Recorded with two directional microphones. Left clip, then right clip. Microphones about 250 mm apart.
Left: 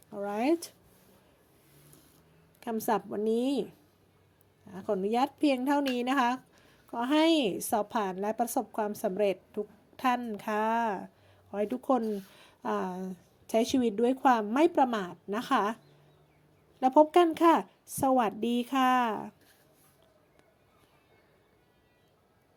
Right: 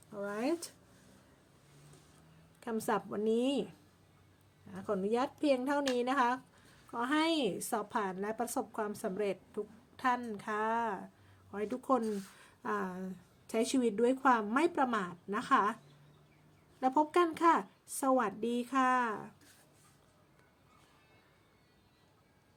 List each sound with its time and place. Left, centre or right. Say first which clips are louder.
0.2 s a sound: left 6 dB; centre
2.6 s speech: left 4 dB; centre
4.7 s a woman's voice: left 4 dB; centre
16.8 s a woman's voice: left 7 dB; centre